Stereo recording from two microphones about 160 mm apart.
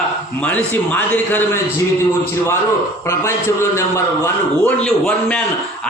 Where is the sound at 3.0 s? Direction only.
15° left (ahead or behind).